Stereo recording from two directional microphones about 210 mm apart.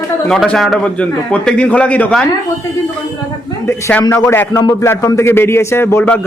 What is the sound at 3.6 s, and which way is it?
A man's voice, 10° left (ahead or behind).